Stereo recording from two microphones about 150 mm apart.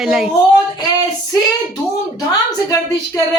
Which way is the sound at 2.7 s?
20° left (ahead or behind).